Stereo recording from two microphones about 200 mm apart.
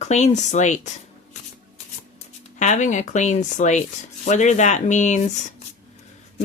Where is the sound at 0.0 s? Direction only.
35° left (ahead or behind).